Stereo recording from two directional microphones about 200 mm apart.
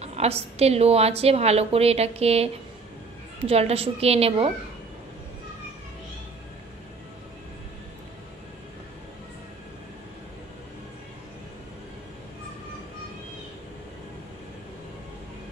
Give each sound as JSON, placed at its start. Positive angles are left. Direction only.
{"t": 0.0, "sound": "a woman's voice", "side_deg": -30}